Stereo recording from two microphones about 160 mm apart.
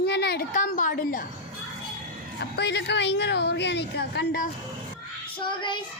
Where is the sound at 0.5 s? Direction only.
55° left (ahead or behind).